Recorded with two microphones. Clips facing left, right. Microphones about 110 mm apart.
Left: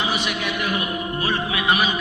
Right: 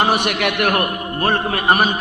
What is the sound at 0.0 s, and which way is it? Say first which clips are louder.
A man's voice: right 7 dB; 60° right (ahead or behind).